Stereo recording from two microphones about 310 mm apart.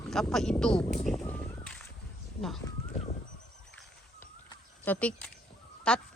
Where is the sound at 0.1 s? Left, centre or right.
Centre.